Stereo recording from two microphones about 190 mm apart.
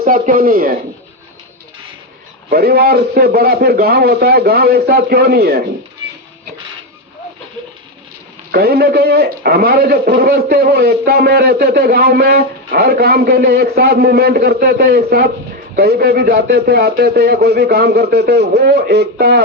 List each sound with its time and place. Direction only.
0.0 s speech: 50° right (ahead or behind)
2.5 s a man's voice: 55° right (ahead or behind)
8.5 s a man's voice: 55° right (ahead or behind)